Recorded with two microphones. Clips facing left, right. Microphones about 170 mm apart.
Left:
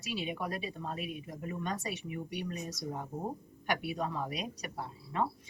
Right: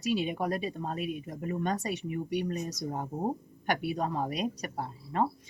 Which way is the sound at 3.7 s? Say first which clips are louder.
Right 4 dB; 40° right (ahead or behind).